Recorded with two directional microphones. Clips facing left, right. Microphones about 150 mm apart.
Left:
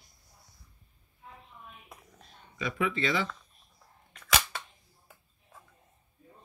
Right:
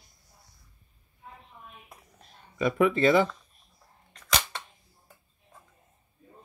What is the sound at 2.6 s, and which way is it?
Speech, 50° right (ahead or behind).